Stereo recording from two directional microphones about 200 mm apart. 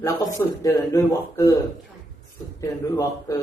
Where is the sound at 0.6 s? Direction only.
15° left (ahead or behind).